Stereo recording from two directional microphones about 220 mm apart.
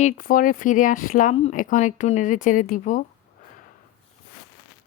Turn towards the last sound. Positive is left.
turn(degrees=35)  # may be behind; listen again after turning